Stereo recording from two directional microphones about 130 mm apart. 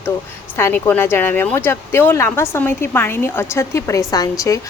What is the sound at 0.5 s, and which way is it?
Speech, 15° left (ahead or behind).